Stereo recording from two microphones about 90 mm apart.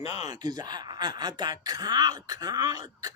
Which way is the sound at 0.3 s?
50° right (ahead or behind).